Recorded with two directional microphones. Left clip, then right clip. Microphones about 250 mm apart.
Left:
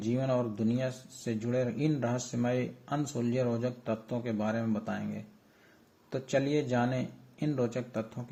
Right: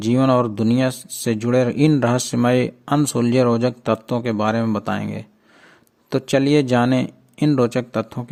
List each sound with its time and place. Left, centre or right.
0.0 s speech: right